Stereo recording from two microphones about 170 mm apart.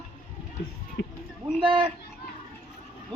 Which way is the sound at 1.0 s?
90° left.